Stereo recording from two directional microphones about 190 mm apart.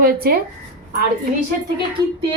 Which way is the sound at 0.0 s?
50° right (ahead or behind).